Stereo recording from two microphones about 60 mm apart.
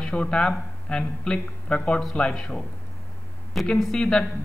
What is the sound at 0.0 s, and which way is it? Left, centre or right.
A man's voice, centre.